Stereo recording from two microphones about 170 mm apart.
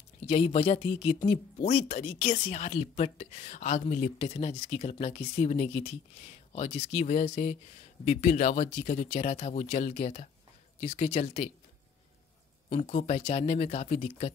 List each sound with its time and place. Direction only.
0.3 s speech: 40° left (ahead or behind)
12.6 s speech: 40° left (ahead or behind)